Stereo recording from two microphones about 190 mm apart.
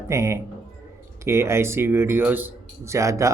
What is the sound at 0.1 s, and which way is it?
Speech, 15° right (ahead or behind).